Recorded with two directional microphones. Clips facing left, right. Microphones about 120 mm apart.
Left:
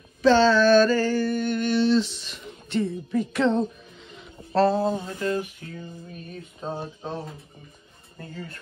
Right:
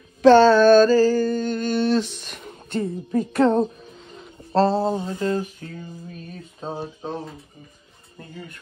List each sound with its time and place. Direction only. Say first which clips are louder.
0.2 s a sound: right 5 dB; 50° right (ahead or behind)
4.1 s speech: right 3 dB; 40° right (ahead or behind)
6.7 s speech: right 2 dB; 15° right (ahead or behind)